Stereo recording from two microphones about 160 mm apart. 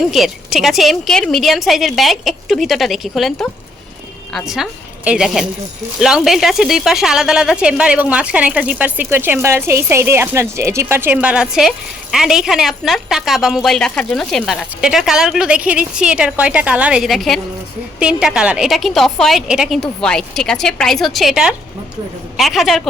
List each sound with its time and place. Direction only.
0.1 s a woman's voice: centre (ahead or behind)